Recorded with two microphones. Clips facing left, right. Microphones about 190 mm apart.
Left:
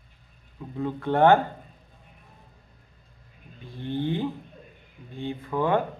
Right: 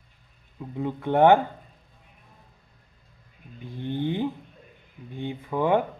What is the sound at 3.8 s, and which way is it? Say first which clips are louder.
Speech: even; 15° right (ahead or behind).